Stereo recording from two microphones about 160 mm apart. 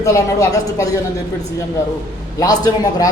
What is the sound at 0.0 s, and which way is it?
Speech, 20° left (ahead or behind).